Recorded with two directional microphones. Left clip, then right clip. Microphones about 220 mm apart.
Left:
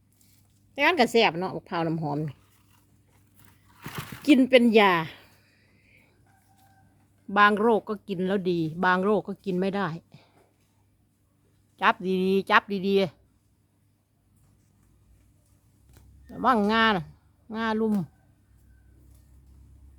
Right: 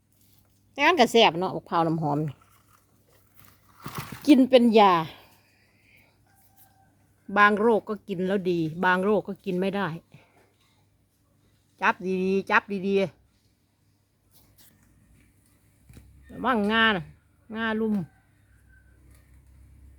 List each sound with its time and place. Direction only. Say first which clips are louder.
0.7 s a woman's voice: right 2 dB; centre (ahead or behind)
3.8 s a sound: right 1 dB; 5° right (ahead or behind)
7.3 s a woman's voice: even; centre (ahead or behind)
11.8 s a woman's voice: left 1 dB; centre (ahead or behind)
16.3 s speech: left 2 dB; 5° left (ahead or behind)